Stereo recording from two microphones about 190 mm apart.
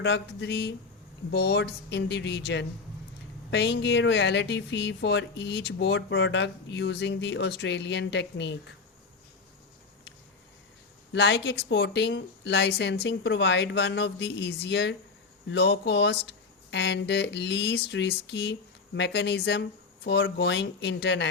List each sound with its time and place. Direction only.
0.0 s speech: 70° left (ahead or behind)
11.1 s speech: 70° left (ahead or behind)